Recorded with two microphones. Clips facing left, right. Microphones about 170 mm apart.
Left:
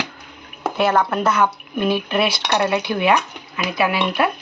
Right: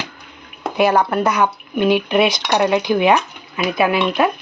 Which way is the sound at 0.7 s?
15° right (ahead or behind).